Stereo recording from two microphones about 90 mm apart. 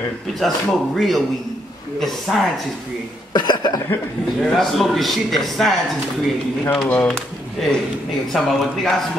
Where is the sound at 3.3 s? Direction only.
55° left (ahead or behind).